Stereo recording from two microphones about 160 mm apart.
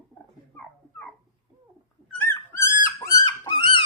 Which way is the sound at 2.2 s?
10° left (ahead or behind).